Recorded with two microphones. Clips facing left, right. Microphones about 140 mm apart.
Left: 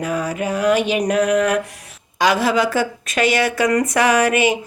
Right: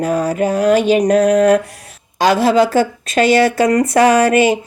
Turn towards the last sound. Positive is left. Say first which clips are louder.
# right 5 dB
turn(degrees=-30)  # may be behind; listen again after turning